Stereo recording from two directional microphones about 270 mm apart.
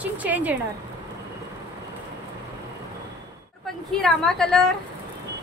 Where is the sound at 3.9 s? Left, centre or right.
Centre.